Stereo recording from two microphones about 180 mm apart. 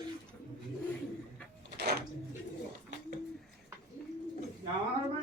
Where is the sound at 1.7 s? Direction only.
60° right (ahead or behind).